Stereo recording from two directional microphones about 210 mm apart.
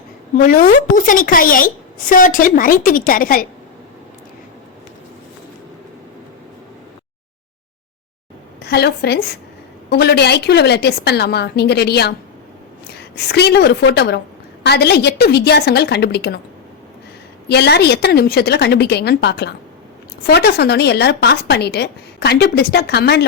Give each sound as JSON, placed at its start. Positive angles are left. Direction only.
{"t": 0.3, "sound": "a woman's voice", "side_deg": 40}
{"t": 8.6, "sound": "a woman's voice", "side_deg": 50}
{"t": 13.2, "sound": "speech", "side_deg": 50}
{"t": 17.5, "sound": "speech", "side_deg": 50}